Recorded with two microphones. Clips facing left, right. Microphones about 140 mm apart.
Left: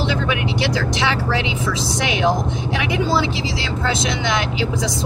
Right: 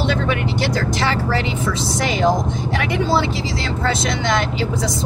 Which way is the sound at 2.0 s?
65° left (ahead or behind).